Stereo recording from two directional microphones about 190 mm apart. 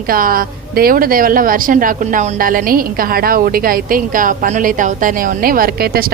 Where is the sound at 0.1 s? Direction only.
50° right (ahead or behind).